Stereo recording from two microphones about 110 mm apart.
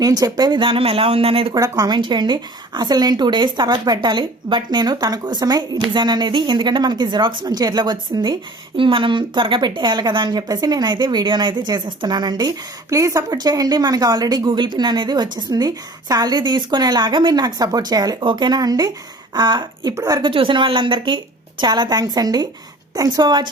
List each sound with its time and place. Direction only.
0.0 s speech: 35° right (ahead or behind); by 1.5 s 60° right (ahead or behind)
1.5 s speech: 35° right (ahead or behind)
20.2 s speech: 50° right (ahead or behind)